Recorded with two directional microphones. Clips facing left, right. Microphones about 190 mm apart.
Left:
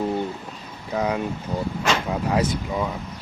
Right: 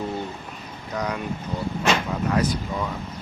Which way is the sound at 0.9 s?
25° left (ahead or behind).